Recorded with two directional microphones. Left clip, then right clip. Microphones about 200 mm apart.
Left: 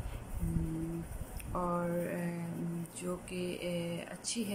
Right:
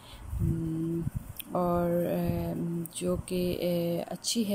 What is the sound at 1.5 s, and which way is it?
Speech, 20° right (ahead or behind).